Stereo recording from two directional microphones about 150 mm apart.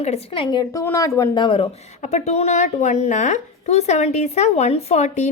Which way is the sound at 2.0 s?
50° left (ahead or behind).